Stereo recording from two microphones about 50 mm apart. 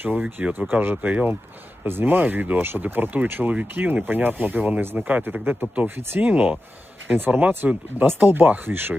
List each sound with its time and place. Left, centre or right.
0.0 s speech: right
1.8 s speech: right
6.1 s speech: right